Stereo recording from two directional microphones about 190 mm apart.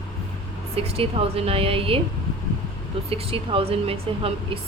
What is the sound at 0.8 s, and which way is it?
A woman's voice, 30° right (ahead or behind).